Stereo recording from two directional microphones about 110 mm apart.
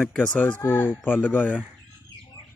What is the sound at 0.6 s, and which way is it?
Speech, 20° left (ahead or behind).